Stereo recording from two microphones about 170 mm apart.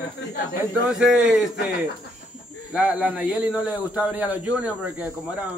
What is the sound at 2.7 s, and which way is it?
A woman's voice, 5° right (ahead or behind).